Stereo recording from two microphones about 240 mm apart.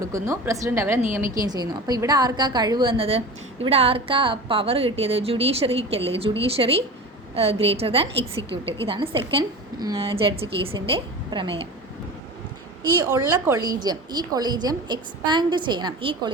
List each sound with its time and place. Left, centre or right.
0.0 s a woman's voice: centre
12.8 s a woman's voice: centre